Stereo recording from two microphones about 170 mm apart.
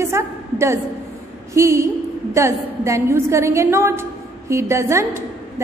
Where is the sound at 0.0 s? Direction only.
15° right (ahead or behind).